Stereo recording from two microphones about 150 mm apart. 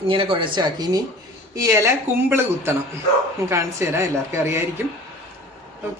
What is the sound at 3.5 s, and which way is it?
A woman's voice, 20° right (ahead or behind).